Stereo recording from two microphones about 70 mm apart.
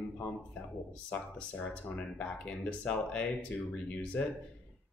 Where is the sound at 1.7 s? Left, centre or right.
Centre.